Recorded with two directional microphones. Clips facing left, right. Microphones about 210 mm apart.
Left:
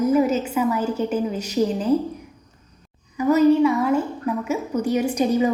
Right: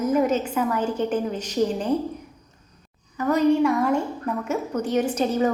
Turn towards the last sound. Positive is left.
turn(degrees=10)  # may be behind; listen again after turning